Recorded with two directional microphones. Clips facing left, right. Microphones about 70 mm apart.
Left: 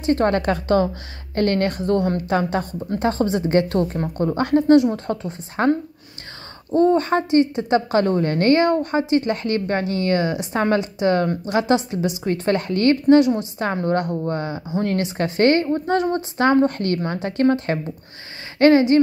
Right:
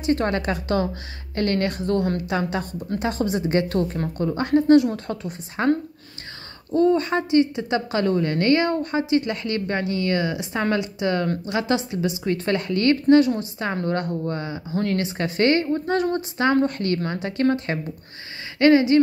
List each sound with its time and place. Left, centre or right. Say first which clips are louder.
0.0 s a woman's voice: left 4 dB; left
4.6 s a woman's voice: left 1 dB; left
6.7 s a woman's voice: left 2 dB; left
14.1 s a woman's voice: left 3 dB; left